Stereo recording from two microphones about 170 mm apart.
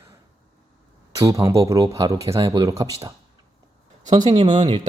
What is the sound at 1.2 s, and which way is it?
Speech, 20° right (ahead or behind).